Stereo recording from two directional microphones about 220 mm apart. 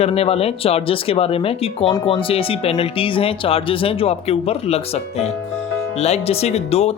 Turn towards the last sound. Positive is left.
turn(degrees=30)  # may be behind; listen again after turning